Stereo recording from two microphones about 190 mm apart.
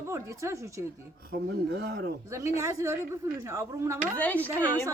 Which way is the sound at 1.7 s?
60° right (ahead or behind).